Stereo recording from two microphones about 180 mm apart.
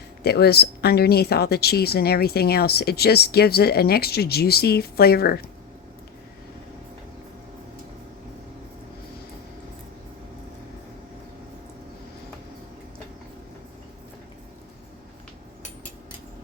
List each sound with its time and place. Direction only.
0.2 s speech: 65° left (ahead or behind)